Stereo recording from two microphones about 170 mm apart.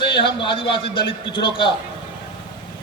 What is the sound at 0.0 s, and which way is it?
A man's voice, 30° left (ahead or behind).